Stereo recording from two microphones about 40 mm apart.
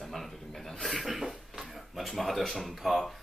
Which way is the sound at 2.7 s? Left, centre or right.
Centre.